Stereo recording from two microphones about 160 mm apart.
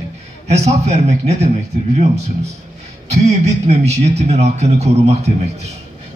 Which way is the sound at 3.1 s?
40° right (ahead or behind).